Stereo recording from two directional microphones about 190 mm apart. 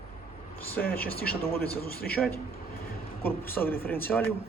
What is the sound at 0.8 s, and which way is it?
Speech, 5° left (ahead or behind).